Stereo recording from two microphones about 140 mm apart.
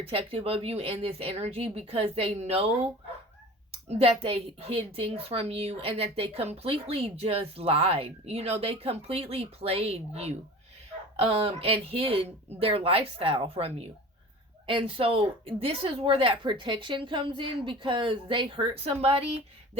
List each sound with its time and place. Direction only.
0.0 s a woman's voice: 40° right (ahead or behind)